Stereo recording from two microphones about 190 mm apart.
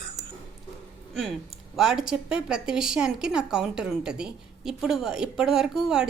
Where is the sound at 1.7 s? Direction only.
5° right (ahead or behind).